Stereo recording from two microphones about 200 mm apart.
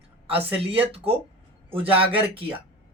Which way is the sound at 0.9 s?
30° right (ahead or behind).